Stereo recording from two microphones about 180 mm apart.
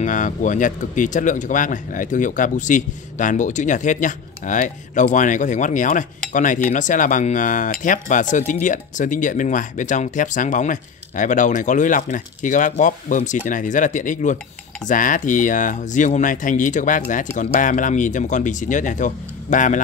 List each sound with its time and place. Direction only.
0.0 s speech: 45° left (ahead or behind)